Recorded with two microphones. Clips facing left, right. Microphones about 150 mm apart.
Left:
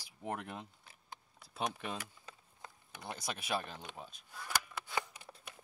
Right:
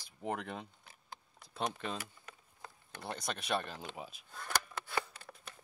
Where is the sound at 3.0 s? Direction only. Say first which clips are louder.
Right 2 dB; 5° left (ahead or behind).